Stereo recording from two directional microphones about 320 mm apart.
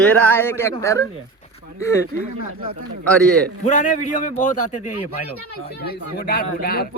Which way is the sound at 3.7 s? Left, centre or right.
Left.